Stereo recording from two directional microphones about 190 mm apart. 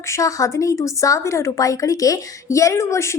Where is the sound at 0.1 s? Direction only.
15° left (ahead or behind).